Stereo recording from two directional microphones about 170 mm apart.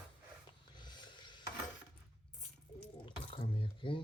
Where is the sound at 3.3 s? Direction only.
30° left (ahead or behind).